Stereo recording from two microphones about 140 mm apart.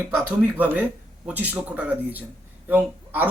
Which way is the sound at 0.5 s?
15° right (ahead or behind).